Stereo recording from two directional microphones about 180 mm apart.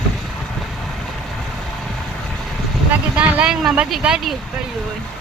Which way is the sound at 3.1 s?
5° right (ahead or behind).